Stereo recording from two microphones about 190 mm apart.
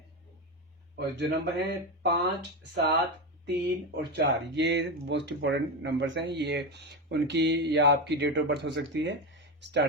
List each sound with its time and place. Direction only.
0.9 s speech: 60° right (ahead or behind)
3.4 s speech: 60° right (ahead or behind)